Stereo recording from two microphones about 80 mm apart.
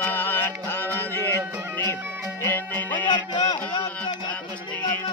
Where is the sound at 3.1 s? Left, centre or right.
Left.